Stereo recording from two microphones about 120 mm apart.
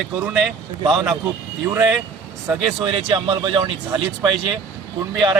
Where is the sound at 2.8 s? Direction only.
45° right (ahead or behind).